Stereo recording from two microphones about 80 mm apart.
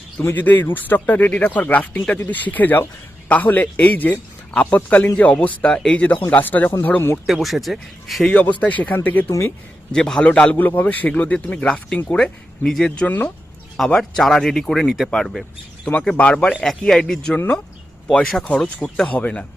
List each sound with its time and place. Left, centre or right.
0.2 s speech: left
7.3 s speech: centre
8.3 s a man's voice: centre
9.9 s a man's voice: centre
13.1 s speech: left
13.7 s speech: centre
16.1 s a man's voice: centre
17.3 s a man's voice: centre
18.1 s a man's voice: centre